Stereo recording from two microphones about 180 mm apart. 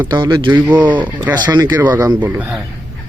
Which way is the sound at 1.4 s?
20° right (ahead or behind).